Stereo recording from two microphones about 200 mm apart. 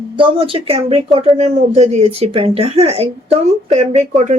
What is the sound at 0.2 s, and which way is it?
A woman's voice, 25° right (ahead or behind).